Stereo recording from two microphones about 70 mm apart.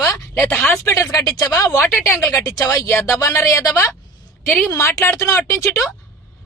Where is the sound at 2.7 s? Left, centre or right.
Left.